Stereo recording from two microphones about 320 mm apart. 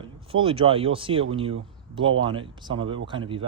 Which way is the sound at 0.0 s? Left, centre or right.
Centre.